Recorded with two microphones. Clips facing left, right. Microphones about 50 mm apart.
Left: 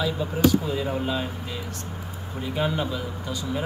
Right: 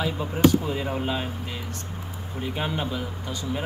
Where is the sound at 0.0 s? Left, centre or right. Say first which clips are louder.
Right 1 dB; right.